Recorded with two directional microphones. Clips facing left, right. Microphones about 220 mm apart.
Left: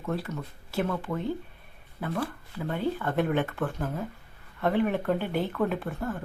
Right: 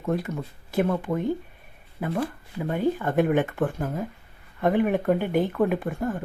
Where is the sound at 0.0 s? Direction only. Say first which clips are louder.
Right 5 dB; 15° right (ahead or behind).